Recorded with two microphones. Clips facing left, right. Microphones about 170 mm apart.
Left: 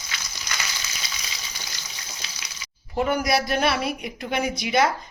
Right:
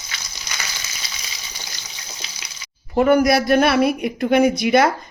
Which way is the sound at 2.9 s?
55° right (ahead or behind).